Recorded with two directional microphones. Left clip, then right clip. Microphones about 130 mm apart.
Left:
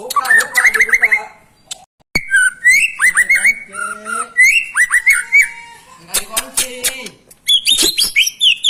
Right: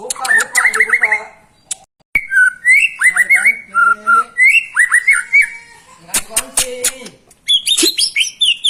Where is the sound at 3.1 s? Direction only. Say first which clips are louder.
Right 1 dB; 15° right (ahead or behind).